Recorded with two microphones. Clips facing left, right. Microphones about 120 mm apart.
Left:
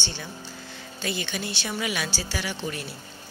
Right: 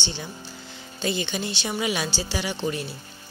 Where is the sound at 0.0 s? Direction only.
20° right (ahead or behind).